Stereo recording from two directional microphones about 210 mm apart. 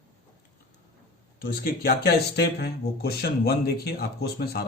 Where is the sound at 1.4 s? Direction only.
45° left (ahead or behind).